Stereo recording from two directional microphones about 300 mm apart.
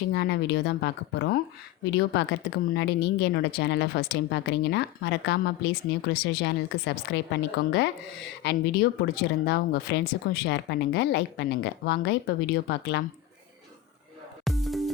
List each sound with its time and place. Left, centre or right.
0.1 s speech: left
8.4 s speech: left
14.4 s music: centre